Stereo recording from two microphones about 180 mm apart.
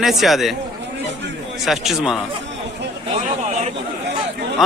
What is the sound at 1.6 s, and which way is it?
Speech, centre (ahead or behind).